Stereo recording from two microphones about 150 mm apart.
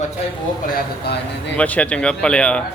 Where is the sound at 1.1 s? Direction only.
90° left.